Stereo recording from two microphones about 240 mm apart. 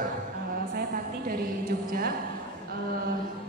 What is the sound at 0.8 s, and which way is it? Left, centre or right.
A woman's voice, right.